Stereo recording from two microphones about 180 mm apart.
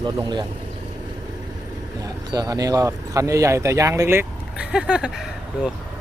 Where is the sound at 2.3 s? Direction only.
20° right (ahead or behind); by 5.7 s 5° right (ahead or behind).